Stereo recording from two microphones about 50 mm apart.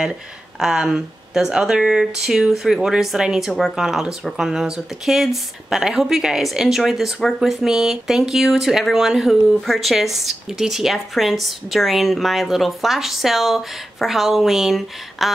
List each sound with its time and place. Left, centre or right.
0.0 s speech: centre